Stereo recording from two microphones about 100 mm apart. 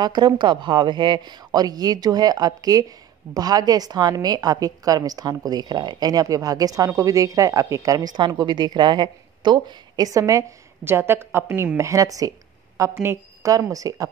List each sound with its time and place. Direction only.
0.0 s a woman's voice: 45° right (ahead or behind)
10.8 s a woman's voice: 25° right (ahead or behind)
13.5 s a woman's voice: 35° right (ahead or behind)